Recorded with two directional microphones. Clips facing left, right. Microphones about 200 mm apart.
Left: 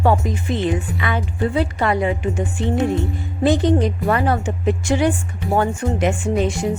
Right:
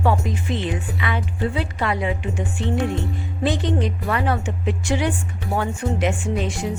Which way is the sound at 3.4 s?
45° left (ahead or behind).